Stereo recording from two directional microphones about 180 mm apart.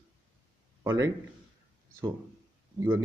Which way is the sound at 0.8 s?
15° right (ahead or behind).